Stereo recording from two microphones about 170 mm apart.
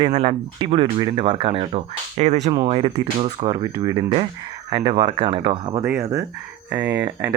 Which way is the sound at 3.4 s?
20° right (ahead or behind).